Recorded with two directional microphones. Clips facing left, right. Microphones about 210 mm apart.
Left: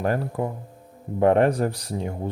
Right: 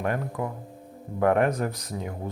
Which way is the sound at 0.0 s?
30° left (ahead or behind).